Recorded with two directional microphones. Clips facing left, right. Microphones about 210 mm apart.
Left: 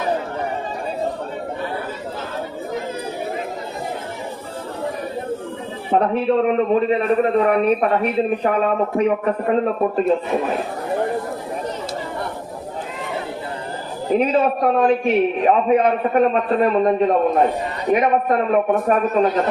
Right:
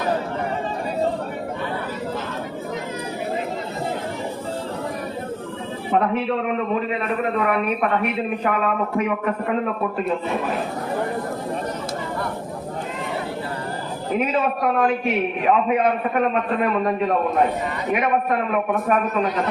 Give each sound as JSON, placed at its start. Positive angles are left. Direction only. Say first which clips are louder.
{"t": 5.9, "sound": "a man's voice", "louder": "left 4 dB", "side_deg": 35}
{"t": 14.1, "sound": "a man's voice", "louder": "left 5 dB", "side_deg": 35}
{"t": 17.9, "sound": "a man's voice", "louder": "left 4 dB", "side_deg": 35}